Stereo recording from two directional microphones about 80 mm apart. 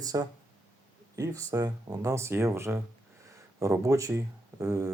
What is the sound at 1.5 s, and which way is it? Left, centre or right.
Speech, right.